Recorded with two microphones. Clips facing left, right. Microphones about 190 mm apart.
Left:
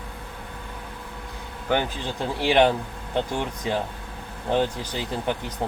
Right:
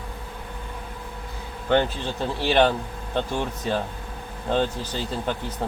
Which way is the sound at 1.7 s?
10° left (ahead or behind).